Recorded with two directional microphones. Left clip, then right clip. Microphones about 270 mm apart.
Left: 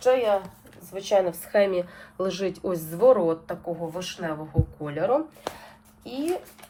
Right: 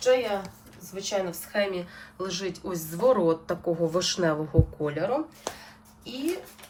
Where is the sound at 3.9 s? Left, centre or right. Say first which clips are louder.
Right 6 dB; centre.